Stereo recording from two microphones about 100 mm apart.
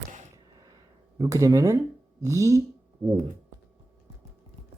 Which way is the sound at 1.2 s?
35° right (ahead or behind).